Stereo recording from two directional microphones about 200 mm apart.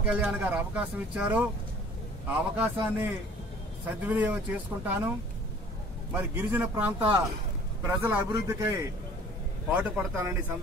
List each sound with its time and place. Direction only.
0.0 s speech: 5° right (ahead or behind)
6.1 s speech: 10° right (ahead or behind)
9.8 s speech: 10° right (ahead or behind)